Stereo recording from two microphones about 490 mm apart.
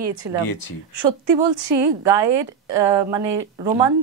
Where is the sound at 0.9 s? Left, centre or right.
Right.